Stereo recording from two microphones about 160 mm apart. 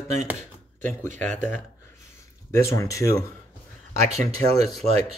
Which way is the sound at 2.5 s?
20° left (ahead or behind).